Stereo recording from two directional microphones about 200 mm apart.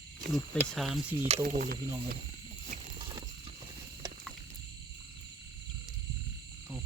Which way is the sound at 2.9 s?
20° right (ahead or behind).